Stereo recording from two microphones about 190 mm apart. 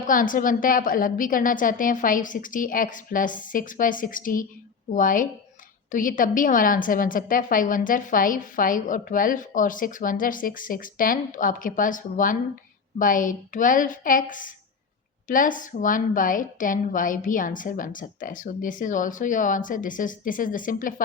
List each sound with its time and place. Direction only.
0.1 s a woman's voice: 45° left (ahead or behind)